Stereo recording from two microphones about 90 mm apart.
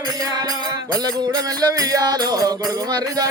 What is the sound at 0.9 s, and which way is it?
Music, 45° right (ahead or behind).